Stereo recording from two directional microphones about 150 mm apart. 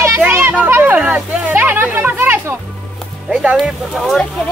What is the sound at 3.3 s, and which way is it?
Speech, 5° right (ahead or behind).